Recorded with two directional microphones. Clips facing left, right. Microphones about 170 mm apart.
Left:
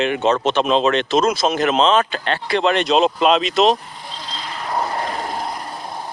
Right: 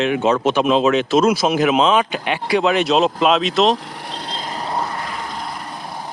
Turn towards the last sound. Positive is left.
turn(degrees=45)  # may be behind; listen again after turning